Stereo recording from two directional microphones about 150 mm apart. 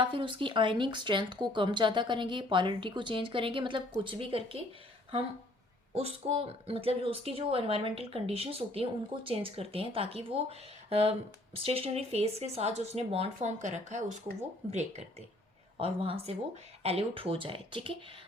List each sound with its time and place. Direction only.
0.0 s speech: 35° right (ahead or behind)
5.9 s speech: 45° right (ahead or behind)
15.8 s speech: 40° right (ahead or behind)